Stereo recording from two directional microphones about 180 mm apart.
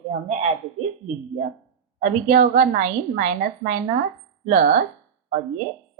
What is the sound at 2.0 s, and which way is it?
Speech, 50° right (ahead or behind).